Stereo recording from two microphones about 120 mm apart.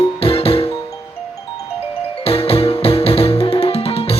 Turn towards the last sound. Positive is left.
turn(degrees=55)  # may be behind; listen again after turning